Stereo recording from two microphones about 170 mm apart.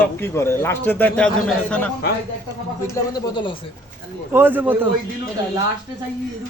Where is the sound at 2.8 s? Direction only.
15° left (ahead or behind).